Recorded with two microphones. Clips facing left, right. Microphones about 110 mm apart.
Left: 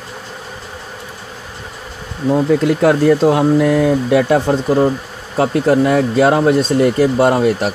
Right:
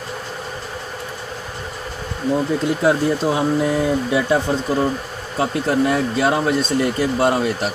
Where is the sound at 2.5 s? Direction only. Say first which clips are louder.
Left 6 dB; 70° left (ahead or behind).